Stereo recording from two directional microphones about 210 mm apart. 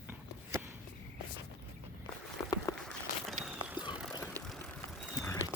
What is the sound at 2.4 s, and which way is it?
Walk, 15° left (ahead or behind).